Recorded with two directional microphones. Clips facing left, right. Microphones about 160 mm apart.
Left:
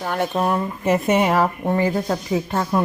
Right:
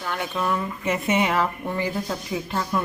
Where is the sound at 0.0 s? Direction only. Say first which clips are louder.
Left 6 dB; 45° left (ahead or behind).